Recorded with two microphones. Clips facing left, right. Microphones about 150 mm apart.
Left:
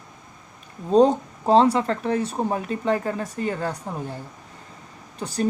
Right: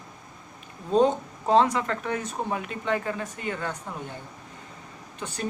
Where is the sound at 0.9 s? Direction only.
35° left (ahead or behind).